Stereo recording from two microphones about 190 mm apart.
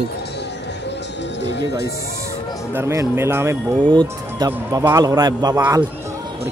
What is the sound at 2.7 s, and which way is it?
A man's voice, 15° right (ahead or behind).